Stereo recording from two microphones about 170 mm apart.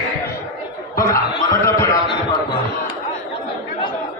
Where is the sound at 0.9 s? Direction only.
20° left (ahead or behind).